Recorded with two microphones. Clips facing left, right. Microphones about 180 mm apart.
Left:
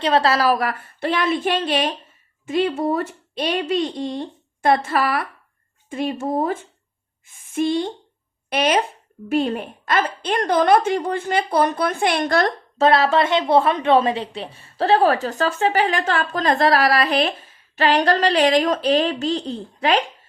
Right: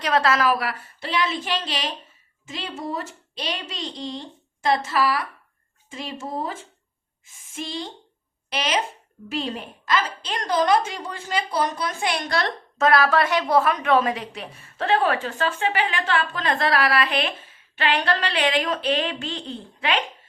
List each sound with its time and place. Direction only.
0.0 s a woman's voice: 30° left (ahead or behind); by 12.8 s 55° left (ahead or behind)
12.8 s a woman's voice: 25° left (ahead or behind)